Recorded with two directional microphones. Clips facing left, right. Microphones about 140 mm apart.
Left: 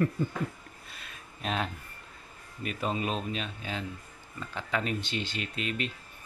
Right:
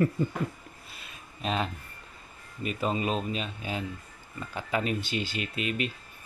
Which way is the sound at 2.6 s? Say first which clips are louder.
Right 3 dB; centre (ahead or behind).